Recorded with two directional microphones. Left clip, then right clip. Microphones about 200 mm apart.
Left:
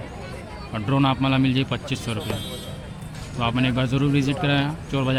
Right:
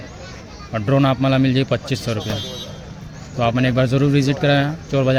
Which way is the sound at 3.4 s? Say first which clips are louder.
Right 6 dB; 20° right (ahead or behind).